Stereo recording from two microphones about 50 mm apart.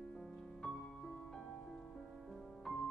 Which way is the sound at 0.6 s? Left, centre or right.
Centre.